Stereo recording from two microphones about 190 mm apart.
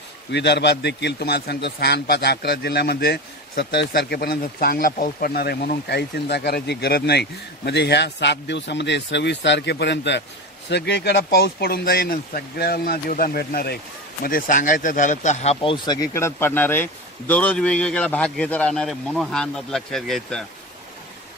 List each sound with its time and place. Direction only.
0.3 s a man's voice: 65° left (ahead or behind); by 15.5 s 40° left (ahead or behind)
15.6 s speech: 25° left (ahead or behind); by 20.4 s 5° left (ahead or behind)